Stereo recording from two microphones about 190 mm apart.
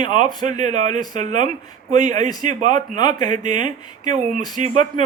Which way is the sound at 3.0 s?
20° left (ahead or behind).